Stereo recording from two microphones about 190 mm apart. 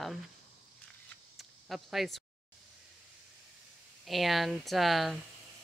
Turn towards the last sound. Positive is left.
turn(degrees=0)  # may be behind; listen again after turning